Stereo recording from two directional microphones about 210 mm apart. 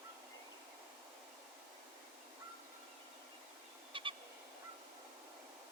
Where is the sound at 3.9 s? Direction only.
25° right (ahead or behind).